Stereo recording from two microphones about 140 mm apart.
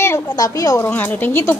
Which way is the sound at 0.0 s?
20° left (ahead or behind).